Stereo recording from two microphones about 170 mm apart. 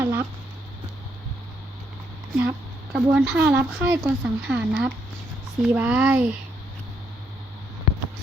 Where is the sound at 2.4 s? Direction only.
10° right (ahead or behind).